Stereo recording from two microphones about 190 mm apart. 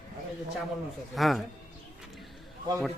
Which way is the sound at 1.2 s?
Centre (ahead or behind).